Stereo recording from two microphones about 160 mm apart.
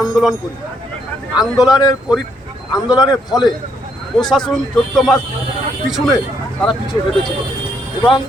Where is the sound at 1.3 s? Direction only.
25° left (ahead or behind).